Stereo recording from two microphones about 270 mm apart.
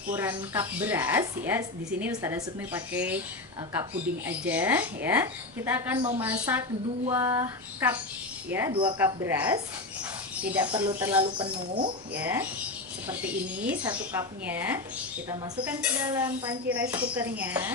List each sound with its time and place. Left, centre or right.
0.1 s a woman's voice: centre
4.3 s a woman's voice: centre
11.3 s speech: centre
12.1 s a woman's voice: centre
13.8 s a woman's voice: centre